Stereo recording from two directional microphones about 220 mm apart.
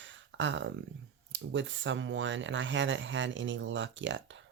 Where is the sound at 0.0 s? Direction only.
55° right (ahead or behind).